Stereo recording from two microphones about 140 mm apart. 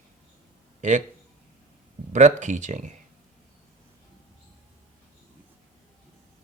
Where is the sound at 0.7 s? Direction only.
60° right (ahead or behind).